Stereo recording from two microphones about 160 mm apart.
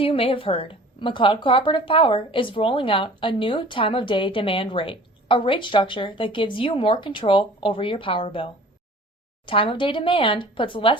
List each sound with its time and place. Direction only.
0.0 s speech: 35° left (ahead or behind)
9.5 s speech: 35° left (ahead or behind)